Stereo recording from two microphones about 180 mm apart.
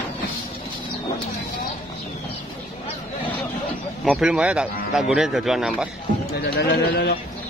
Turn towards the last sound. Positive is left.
turn(degrees=60)  # may be behind; listen again after turning